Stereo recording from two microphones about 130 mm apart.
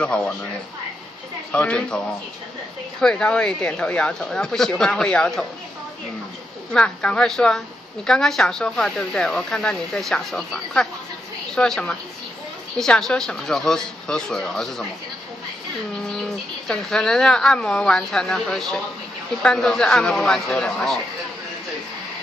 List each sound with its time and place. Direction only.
0.0 s speech: 5° left (ahead or behind)
1.5 s speech: 10° left (ahead or behind)
3.0 s speech: 5° left (ahead or behind)
6.7 s speech: 10° left (ahead or behind)
15.9 s speech: 5° left (ahead or behind)